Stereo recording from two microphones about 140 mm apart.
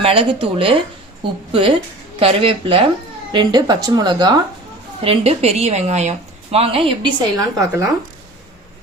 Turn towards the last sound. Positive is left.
turn(degrees=-25)  # may be behind; listen again after turning